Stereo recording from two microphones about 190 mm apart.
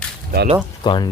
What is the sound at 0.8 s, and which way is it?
Speech, 25° left (ahead or behind).